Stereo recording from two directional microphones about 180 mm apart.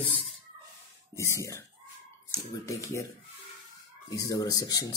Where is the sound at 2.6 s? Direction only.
15° left (ahead or behind).